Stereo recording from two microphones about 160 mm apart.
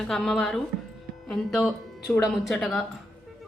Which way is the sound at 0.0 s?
Centre (ahead or behind).